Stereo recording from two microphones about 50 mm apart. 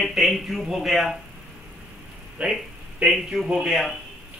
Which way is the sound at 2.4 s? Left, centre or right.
Right.